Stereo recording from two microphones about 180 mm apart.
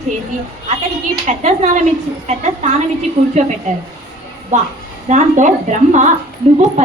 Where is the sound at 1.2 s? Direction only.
40° right (ahead or behind).